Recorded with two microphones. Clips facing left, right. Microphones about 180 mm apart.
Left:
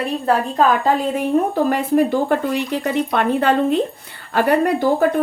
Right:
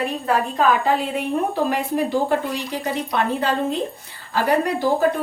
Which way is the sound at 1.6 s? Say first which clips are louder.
Left 5 dB; 50° left (ahead or behind).